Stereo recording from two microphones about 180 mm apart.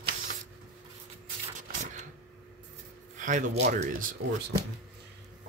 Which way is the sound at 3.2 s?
45° right (ahead or behind).